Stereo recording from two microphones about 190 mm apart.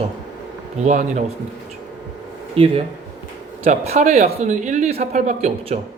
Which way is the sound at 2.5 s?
30° right (ahead or behind).